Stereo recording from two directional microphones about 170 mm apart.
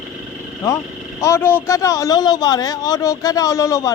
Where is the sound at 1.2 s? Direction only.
15° left (ahead or behind).